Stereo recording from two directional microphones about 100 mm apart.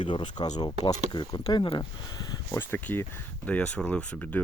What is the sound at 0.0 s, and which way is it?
Speech, 55° left (ahead or behind).